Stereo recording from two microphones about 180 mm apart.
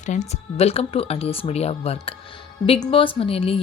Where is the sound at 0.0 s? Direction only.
40° left (ahead or behind).